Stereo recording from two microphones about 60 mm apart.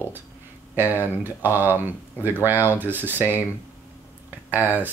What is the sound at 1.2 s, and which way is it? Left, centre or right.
Speech, right.